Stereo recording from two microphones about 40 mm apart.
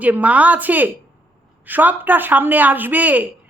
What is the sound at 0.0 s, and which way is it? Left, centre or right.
A woman's voice, right.